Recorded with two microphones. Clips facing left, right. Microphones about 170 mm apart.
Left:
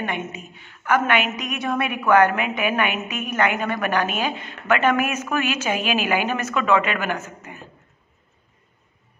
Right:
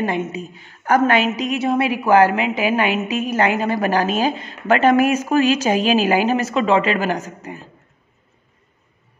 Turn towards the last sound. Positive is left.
turn(degrees=-35)  # may be behind; listen again after turning